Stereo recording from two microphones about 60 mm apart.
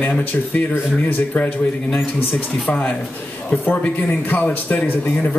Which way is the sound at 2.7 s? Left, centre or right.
Left.